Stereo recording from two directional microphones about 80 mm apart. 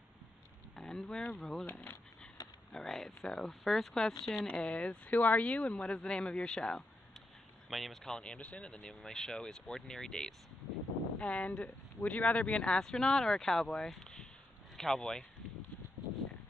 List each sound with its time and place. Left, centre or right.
0.7 s a sound: centre
1.4 s speech: centre
1.7 s speech: left
2.7 s speech: centre
4.5 s speech: centre